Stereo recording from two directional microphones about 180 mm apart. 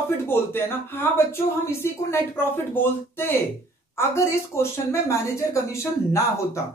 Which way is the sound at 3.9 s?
15° left (ahead or behind).